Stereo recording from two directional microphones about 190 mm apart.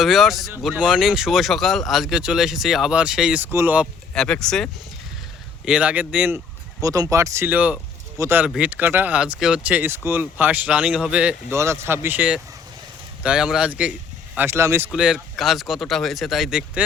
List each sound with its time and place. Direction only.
0.0 s speech: centre (ahead or behind)
4.1 s speech: 5° left (ahead or behind)
6.8 s speech: 20° right (ahead or behind)